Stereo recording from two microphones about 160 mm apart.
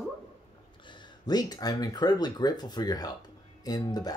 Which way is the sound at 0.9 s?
25° left (ahead or behind).